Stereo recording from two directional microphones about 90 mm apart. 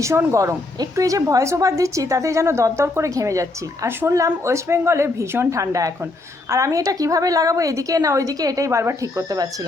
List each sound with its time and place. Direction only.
0.0 s a woman's voice: 30° right (ahead or behind)